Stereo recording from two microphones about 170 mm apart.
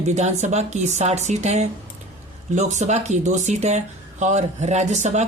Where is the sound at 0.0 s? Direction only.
40° right (ahead or behind).